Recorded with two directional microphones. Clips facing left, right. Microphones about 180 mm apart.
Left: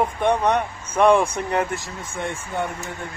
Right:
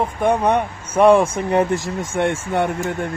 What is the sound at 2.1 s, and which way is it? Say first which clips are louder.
Speech: right 8 dB; 90° right.